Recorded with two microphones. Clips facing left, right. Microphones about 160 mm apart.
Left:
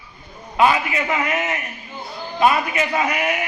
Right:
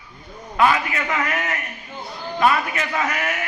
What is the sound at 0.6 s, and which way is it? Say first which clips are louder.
A man's voice: left 1 dB; 15° left (ahead or behind).